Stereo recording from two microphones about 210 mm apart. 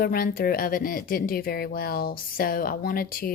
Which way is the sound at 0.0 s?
45° left (ahead or behind).